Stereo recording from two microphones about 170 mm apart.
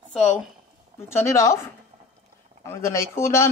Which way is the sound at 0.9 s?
15° left (ahead or behind).